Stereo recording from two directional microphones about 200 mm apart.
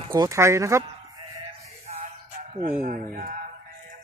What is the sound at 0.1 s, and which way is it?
Speech, 15° right (ahead or behind).